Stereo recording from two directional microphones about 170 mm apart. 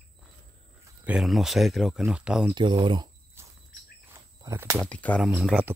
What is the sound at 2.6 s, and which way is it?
Speech, 30° right (ahead or behind).